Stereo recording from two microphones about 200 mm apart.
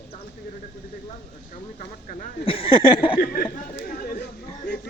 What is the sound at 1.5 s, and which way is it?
Speech, 40° left (ahead or behind).